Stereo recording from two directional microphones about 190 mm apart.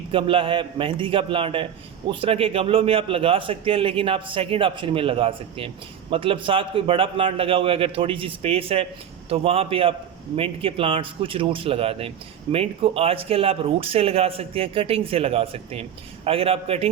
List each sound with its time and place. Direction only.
0.1 s a man's voice: 30° right (ahead or behind)